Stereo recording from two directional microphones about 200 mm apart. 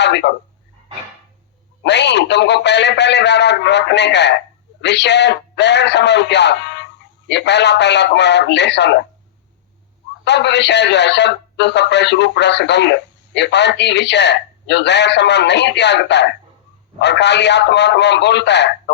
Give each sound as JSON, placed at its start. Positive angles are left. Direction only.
{"t": 0.0, "sound": "speech", "side_deg": 60}
{"t": 1.8, "sound": "speech", "side_deg": 60}
{"t": 10.2, "sound": "speech", "side_deg": 60}